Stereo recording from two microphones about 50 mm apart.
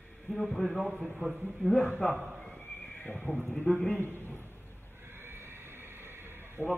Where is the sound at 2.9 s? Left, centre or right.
Left.